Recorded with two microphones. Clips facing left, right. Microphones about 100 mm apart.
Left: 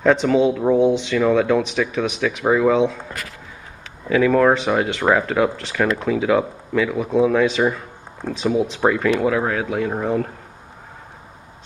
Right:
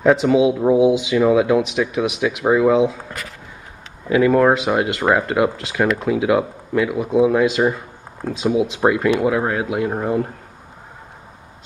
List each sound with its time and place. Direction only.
0.0 s speech: 5° right (ahead or behind)
4.1 s speech: 5° right (ahead or behind)